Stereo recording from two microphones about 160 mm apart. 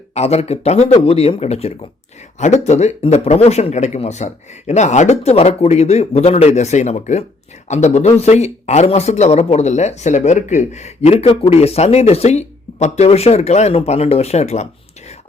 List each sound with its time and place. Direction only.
0.1 s speech: 40° left (ahead or behind)